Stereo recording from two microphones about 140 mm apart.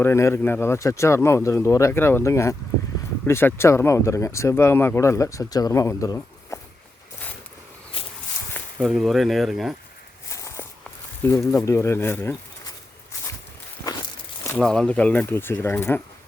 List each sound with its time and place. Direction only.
0.0 s speech: 20° left (ahead or behind)
6.5 s walk: 20° left (ahead or behind)
7.9 s a sound: 40° left (ahead or behind)
8.8 s speech: centre (ahead or behind)
10.2 s walk: 20° left (ahead or behind)
11.5 s speech: 20° left (ahead or behind)
14.6 s speech: 5° left (ahead or behind)